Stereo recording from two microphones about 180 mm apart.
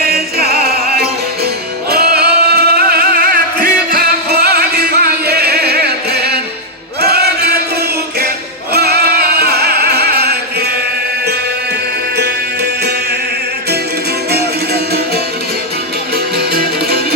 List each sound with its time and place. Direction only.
0.1 s music: 60° right (ahead or behind)
8.7 s music: 60° right (ahead or behind)
14.3 s music: 60° right (ahead or behind)